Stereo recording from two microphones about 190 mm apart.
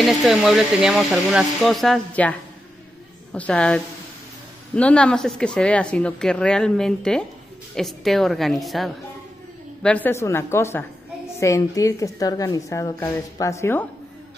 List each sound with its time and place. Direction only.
0.0 s speech: centre (ahead or behind)
3.3 s speech: 5° left (ahead or behind)